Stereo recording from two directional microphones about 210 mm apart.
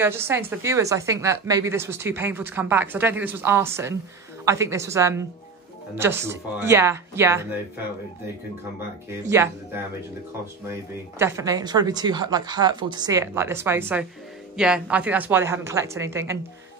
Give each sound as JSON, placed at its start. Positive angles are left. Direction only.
{"t": 0.0, "sound": "speech", "side_deg": -10}
{"t": 11.1, "sound": "speech", "side_deg": -15}